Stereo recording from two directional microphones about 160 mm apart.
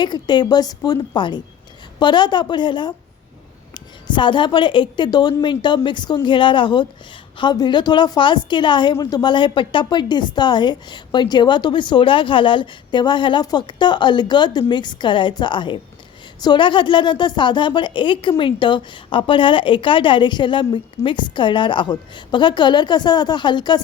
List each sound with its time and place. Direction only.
0.0 s a woman's voice: 30° left (ahead or behind)